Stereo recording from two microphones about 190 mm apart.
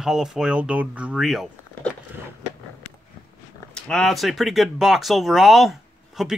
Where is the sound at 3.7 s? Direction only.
5° left (ahead or behind).